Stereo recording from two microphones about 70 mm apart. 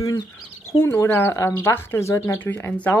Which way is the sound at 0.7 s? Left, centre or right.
Left.